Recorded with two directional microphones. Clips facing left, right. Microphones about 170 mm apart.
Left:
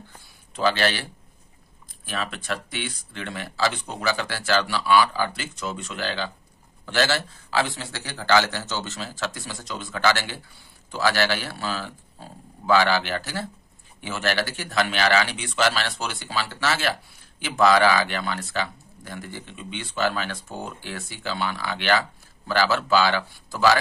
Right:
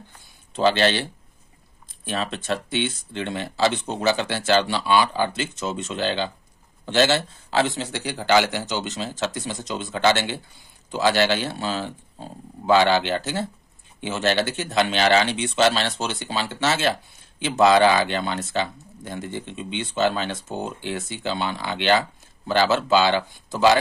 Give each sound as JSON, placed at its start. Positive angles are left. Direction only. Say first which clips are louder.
{"t": 0.6, "sound": "speech", "louder": "right 4 dB", "side_deg": -25}
{"t": 2.0, "sound": "speech", "louder": "right 4 dB", "side_deg": -25}